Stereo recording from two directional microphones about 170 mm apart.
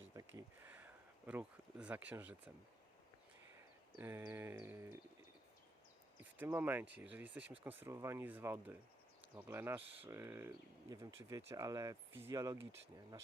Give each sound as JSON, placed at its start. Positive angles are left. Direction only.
{"t": 0.1, "sound": "a sound", "side_deg": -20}
{"t": 1.3, "sound": "speech", "side_deg": -10}
{"t": 3.9, "sound": "speech", "side_deg": -15}
{"t": 6.3, "sound": "speech", "side_deg": -10}